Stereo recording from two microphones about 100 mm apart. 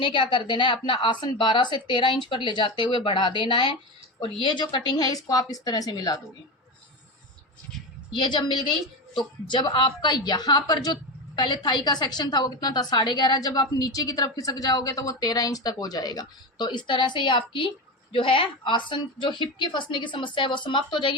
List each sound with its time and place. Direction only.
0.0 s a woman's voice: 60° left (ahead or behind); by 6.1 s 40° left (ahead or behind)
8.1 s a woman's voice: 50° left (ahead or behind)